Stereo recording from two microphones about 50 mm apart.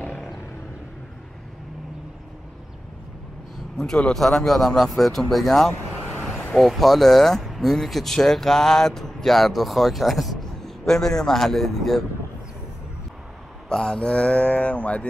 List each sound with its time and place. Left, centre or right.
3.7 s a man's voice: centre
13.7 s speech: centre